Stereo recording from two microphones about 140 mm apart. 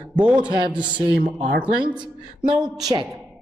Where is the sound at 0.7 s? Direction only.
35° right (ahead or behind).